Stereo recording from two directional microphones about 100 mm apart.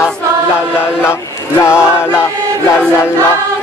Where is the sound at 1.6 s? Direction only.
25° left (ahead or behind).